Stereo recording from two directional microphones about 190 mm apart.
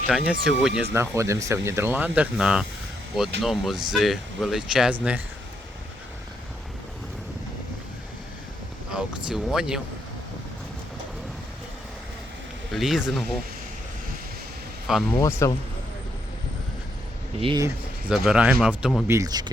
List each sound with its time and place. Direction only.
0.1 s speech: centre (ahead or behind)
0.9 s speech: 15° right (ahead or behind)
8.9 s speech: 5° right (ahead or behind)
12.7 s speech: centre (ahead or behind)
14.9 s speech: 5° right (ahead or behind)
15.4 s speech: 15° left (ahead or behind)
17.4 s speech: 25° right (ahead or behind)
18.1 s speech: 5° right (ahead or behind)
19.0 s speech: 15° right (ahead or behind)